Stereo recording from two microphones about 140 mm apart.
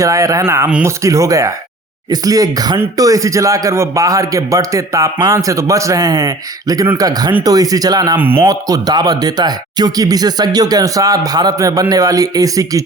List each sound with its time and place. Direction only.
0.0 s speech: 25° right (ahead or behind)
8.2 s speech: 15° right (ahead or behind)
8.4 s speech: 25° right (ahead or behind)